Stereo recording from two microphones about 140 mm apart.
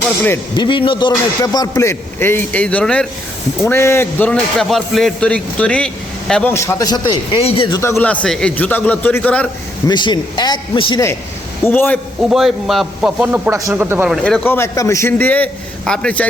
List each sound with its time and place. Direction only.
0.5 s speech: 35° left (ahead or behind); by 3.1 s 5° left (ahead or behind)
3.6 s a man's voice: 20° left (ahead or behind)
4.7 s a man's voice: centre (ahead or behind)
6.5 s speech: 20° left (ahead or behind); by 7.8 s 40° left (ahead or behind)
7.8 s a man's voice: 20° left (ahead or behind)
9.8 s speech: 30° left (ahead or behind)
11.6 s a man's voice: 15° left (ahead or behind)
12.3 s a man's voice: centre (ahead or behind)
14.1 s a man's voice: 5° left (ahead or behind)
14.4 s a man's voice: 15° left (ahead or behind)